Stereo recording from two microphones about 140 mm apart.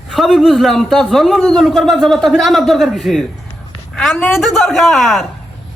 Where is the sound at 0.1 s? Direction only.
Centre (ahead or behind).